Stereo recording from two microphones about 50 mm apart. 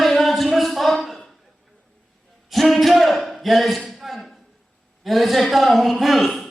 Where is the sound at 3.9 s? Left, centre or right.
Centre.